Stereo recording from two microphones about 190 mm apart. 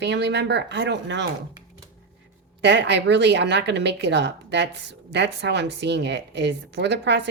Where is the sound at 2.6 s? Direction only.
65° right (ahead or behind).